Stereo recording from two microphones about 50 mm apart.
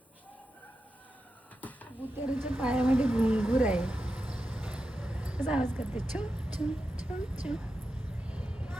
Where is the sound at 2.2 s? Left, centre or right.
Right.